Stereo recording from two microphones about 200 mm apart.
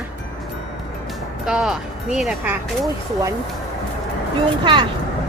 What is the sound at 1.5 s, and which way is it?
Speech, centre (ahead or behind).